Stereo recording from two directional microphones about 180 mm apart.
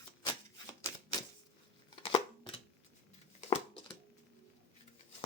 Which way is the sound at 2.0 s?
30° left (ahead or behind).